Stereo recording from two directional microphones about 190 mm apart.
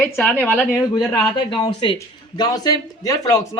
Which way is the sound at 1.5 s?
25° left (ahead or behind).